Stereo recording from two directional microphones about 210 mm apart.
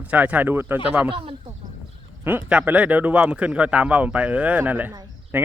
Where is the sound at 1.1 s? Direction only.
25° right (ahead or behind).